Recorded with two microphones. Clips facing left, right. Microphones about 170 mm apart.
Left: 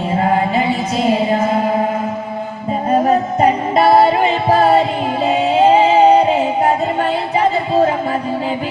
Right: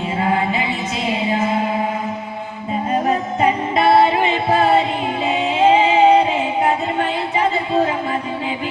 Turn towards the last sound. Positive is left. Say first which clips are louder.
# left 4 dB
turn(degrees=35)  # may be behind; listen again after turning